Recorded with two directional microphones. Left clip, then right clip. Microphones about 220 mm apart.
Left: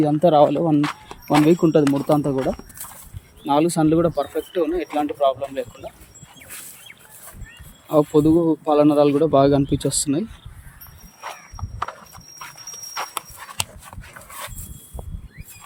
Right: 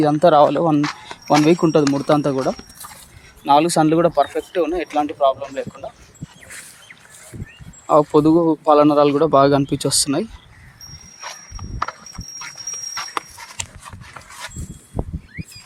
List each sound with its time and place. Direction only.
0.0 s speech: 5° right (ahead or behind)
2.0 s speech: 25° right (ahead or behind)
2.3 s speech: 5° left (ahead or behind)
7.9 s speech: 5° left (ahead or behind)
12.9 s dog: centre (ahead or behind)